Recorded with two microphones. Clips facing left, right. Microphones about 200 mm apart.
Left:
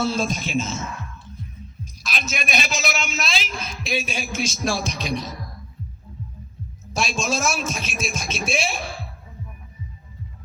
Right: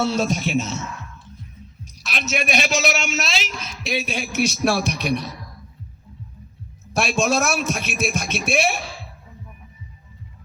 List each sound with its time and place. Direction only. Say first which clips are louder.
0.0 s a man's voice: right 2 dB; 70° right (ahead or behind)
3.8 s a man's voice: right 2 dB; 60° right (ahead or behind)
6.9 s a man's voice: right 4 dB; 60° right (ahead or behind)